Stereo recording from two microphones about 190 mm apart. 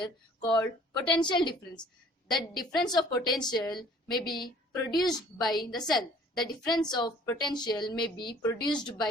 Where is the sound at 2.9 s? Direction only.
20° left (ahead or behind).